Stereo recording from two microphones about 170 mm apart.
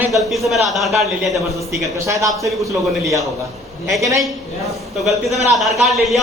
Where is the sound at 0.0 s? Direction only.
20° right (ahead or behind).